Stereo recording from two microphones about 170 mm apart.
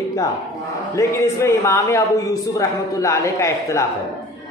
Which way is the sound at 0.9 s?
15° left (ahead or behind).